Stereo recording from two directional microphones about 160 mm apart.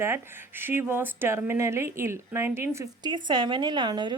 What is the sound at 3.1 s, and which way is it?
A woman's voice, 30° right (ahead or behind).